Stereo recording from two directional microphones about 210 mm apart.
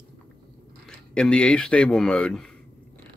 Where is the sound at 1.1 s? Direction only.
5° left (ahead or behind).